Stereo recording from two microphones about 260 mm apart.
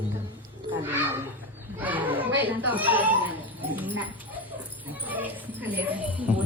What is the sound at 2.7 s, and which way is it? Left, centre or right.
Speech, centre.